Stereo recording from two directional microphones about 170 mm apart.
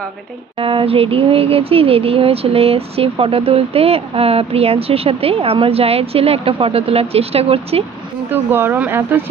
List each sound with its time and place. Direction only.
0.6 s speech: 30° right (ahead or behind)
8.3 s speech: 10° right (ahead or behind)